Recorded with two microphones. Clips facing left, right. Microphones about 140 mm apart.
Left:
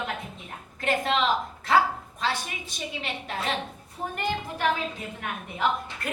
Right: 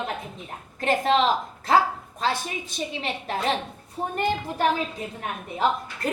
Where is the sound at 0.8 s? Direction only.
35° right (ahead or behind).